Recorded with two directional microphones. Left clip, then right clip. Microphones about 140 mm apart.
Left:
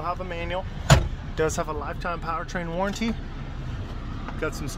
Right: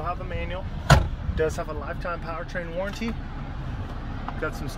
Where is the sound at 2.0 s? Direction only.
25° left (ahead or behind).